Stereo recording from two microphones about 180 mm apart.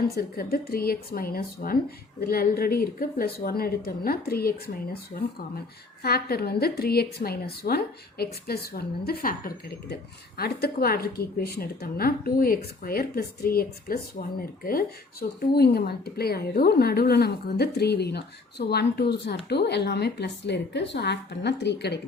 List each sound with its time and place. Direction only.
0.2 s a woman's voice: 55° left (ahead or behind)
6.0 s a woman's voice: 60° left (ahead or behind)